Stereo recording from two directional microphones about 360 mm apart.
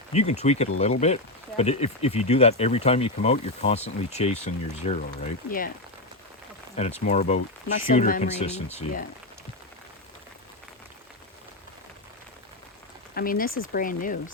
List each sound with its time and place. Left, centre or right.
0.1 s speech: centre
6.7 s speech: centre
13.1 s speech: left